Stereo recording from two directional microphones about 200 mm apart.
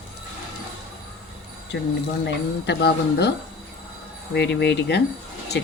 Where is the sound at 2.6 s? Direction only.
60° left (ahead or behind).